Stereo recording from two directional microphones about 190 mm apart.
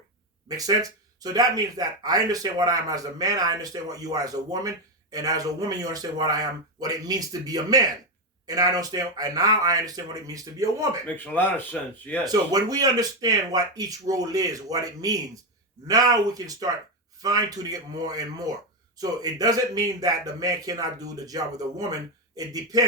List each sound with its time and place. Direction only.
0.4 s speech: 20° right (ahead or behind)
11.3 s speech: 10° left (ahead or behind)
12.2 s speech: 20° right (ahead or behind)